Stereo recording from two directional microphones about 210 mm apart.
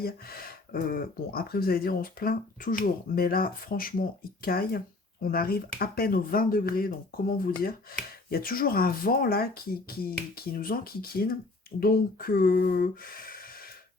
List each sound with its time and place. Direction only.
0.0 s speech: 45° left (ahead or behind)